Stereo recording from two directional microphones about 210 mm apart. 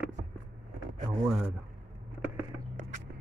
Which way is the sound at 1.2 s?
5° right (ahead or behind).